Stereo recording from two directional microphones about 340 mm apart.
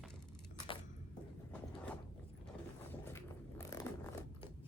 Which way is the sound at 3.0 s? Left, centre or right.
Centre.